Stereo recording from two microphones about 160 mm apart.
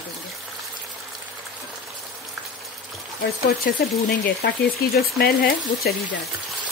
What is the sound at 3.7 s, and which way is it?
Speech, 80° left.